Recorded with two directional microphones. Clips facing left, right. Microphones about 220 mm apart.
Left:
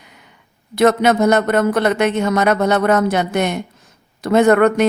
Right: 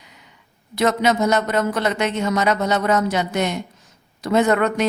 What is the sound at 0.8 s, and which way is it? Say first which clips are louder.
Speech: left 5 dB; 55° left (ahead or behind).